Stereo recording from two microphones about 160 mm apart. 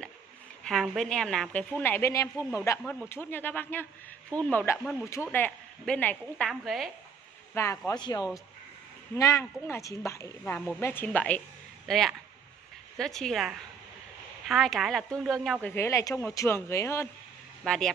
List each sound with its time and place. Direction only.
0.9 s speech: 5° left (ahead or behind)
7.5 s a woman's voice: 15° left (ahead or behind)
15.7 s speech: 15° left (ahead or behind)
17.6 s a woman's voice: 5° left (ahead or behind)